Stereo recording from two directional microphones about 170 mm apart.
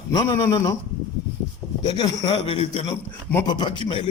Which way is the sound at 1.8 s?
25° left (ahead or behind).